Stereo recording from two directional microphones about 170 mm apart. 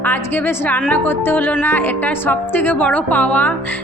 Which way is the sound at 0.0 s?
10° left (ahead or behind).